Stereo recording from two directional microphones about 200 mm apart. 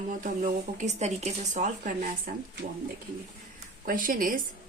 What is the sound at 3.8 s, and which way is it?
Speech, 45° right (ahead or behind).